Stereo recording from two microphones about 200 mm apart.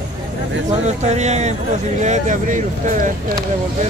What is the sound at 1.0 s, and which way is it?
Speech, 35° right (ahead or behind).